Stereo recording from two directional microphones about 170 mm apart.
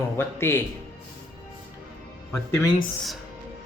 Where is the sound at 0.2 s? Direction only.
15° left (ahead or behind).